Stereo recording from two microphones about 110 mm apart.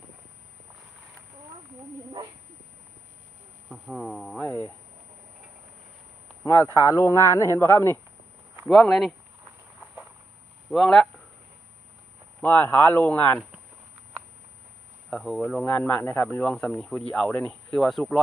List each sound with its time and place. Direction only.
3.7 s speech: centre (ahead or behind)
4.4 s a man's voice: 20° left (ahead or behind)
6.4 s a man's voice: 25° left (ahead or behind)
8.6 s speech: 5° left (ahead or behind)
10.7 s speech: 5° left (ahead or behind)
12.4 s speech: 20° left (ahead or behind)
15.1 s speech: centre (ahead or behind)
15.6 s a man's voice: 15° left (ahead or behind)
16.4 s speech: 5° left (ahead or behind)